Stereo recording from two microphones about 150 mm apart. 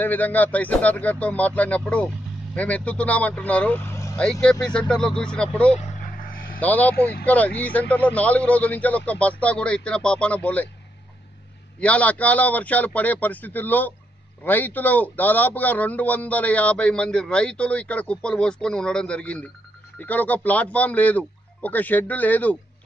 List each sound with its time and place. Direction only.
0.0 s a man's voice: 10° left (ahead or behind)
5.8 s vehicle: 70° left (ahead or behind)
6.6 s a man's voice: 10° left (ahead or behind)
11.8 s a man's voice: 10° left (ahead or behind)